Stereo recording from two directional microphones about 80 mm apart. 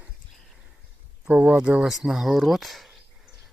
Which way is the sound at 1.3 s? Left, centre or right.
Centre.